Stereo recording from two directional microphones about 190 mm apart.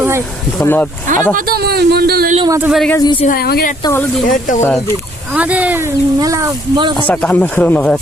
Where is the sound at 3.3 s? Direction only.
55° left (ahead or behind).